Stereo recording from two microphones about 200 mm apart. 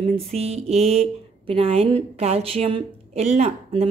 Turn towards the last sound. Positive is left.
turn(degrees=-35)  # may be behind; listen again after turning